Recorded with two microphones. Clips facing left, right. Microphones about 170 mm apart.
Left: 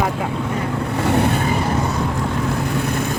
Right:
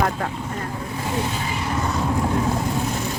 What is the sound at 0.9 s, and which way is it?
Vehicle, 70° left (ahead or behind).